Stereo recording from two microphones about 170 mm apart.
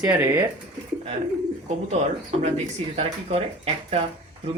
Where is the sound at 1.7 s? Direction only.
40° right (ahead or behind).